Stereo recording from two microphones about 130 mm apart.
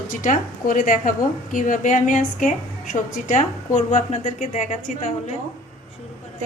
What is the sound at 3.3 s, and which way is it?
A woman's voice, 70° left (ahead or behind).